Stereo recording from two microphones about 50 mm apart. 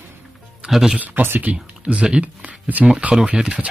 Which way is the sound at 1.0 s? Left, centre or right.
Right.